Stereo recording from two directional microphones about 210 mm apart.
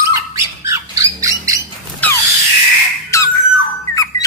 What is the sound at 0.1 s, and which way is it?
Squawk, 15° right (ahead or behind).